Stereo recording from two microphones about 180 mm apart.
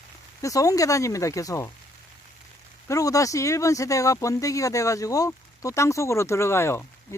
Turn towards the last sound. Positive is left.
turn(degrees=15)  # may be behind; listen again after turning